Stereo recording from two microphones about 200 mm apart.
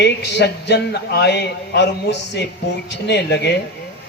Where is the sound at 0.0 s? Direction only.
60° left (ahead or behind).